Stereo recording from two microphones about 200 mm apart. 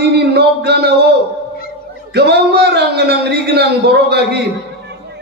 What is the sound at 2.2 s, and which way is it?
A man's voice, 55° right (ahead or behind).